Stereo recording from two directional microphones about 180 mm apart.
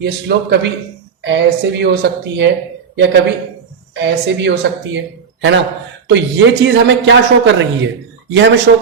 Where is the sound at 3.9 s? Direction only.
80° right.